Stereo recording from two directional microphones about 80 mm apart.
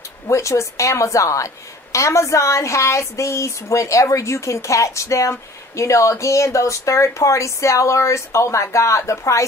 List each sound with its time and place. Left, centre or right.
0.3 s a woman's voice: left